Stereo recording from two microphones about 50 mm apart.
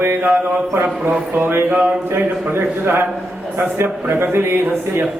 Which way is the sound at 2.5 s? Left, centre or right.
Right.